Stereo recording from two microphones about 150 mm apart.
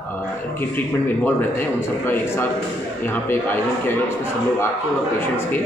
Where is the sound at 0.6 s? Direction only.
15° left (ahead or behind).